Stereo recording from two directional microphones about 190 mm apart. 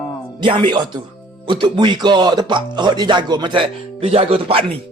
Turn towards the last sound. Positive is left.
turn(degrees=-30)  # may be behind; listen again after turning